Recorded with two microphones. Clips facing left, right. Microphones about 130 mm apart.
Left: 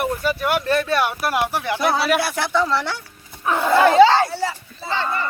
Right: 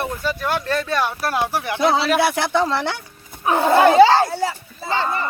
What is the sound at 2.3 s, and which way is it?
Speech, 60° right (ahead or behind).